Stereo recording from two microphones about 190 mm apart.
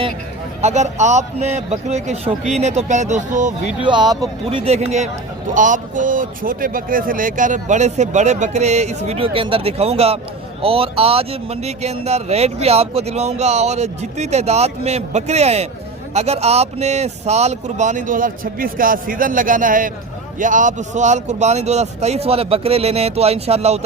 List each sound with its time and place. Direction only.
0.6 s speech: 35° right (ahead or behind)
4.1 s speech: 20° right (ahead or behind)
4.6 s speech: 35° right (ahead or behind)